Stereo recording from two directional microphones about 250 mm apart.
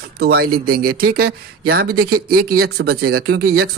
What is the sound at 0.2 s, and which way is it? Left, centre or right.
Speech, right.